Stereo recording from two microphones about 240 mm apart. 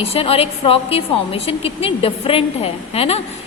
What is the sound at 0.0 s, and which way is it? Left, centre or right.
A woman's voice, left.